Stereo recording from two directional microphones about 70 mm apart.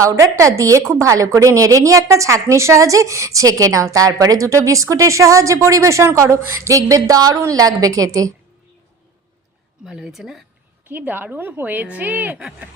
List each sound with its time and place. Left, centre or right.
0.0 s a woman's voice: right
9.8 s a woman's voice: centre
10.8 s a woman's voice: right